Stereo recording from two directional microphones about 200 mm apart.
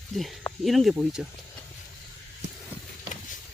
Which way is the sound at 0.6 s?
Centre (ahead or behind).